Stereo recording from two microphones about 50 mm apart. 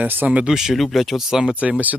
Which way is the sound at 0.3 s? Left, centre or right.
Right.